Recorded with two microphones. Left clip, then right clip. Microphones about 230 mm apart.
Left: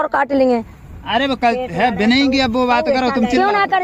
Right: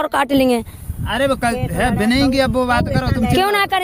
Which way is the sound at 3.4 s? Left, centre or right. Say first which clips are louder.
Even; right.